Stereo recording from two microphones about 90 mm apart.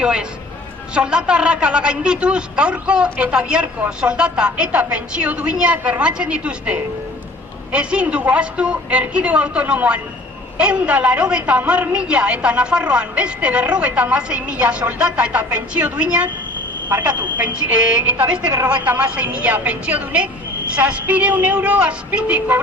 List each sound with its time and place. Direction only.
0.0 s a woman's voice: 10° right (ahead or behind)